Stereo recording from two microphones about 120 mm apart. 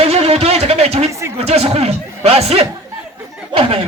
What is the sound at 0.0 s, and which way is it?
Music, 55° right (ahead or behind).